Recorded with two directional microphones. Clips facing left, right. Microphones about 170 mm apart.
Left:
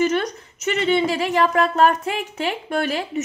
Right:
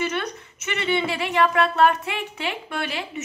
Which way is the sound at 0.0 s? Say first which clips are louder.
Left 6 dB; 40° left (ahead or behind).